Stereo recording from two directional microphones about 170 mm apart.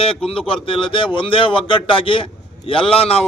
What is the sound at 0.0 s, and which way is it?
Speech, 35° left (ahead or behind).